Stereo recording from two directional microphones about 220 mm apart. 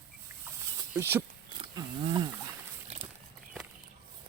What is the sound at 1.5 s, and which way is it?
Wild animals, 25° right (ahead or behind).